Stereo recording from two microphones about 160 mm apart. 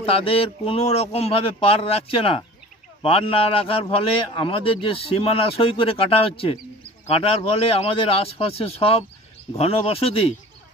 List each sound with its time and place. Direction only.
0.0 s a man's voice: 35° left (ahead or behind)